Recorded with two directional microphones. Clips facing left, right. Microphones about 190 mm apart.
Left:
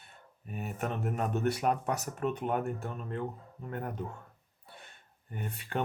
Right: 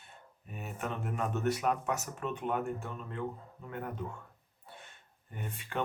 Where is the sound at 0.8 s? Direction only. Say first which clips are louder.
Left 2 dB; 40° left (ahead or behind).